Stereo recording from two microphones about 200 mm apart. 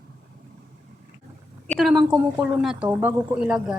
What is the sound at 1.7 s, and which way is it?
A woman's voice, centre (ahead or behind).